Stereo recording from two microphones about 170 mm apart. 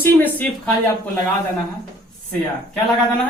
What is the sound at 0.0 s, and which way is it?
Speech, 10° left (ahead or behind).